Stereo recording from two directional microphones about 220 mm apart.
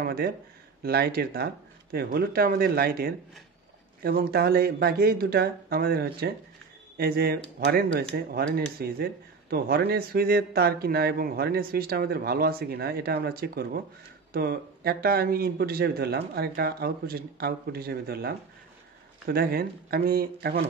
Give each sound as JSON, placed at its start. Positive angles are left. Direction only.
{"t": 0.0, "sound": "speech", "side_deg": -45}